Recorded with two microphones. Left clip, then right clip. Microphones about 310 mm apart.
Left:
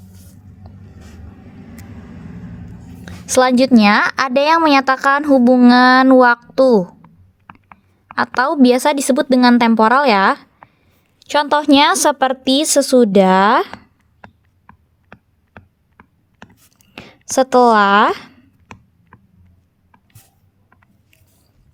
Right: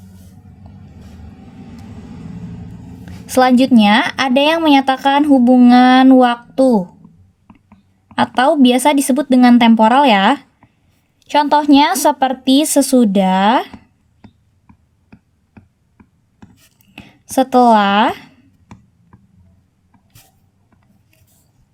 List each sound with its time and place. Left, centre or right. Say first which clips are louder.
3.2 s a woman's voice: right 1 dB; left
8.1 s a woman's voice: right 3 dB; left
16.7 s a sound: left 3 dB; left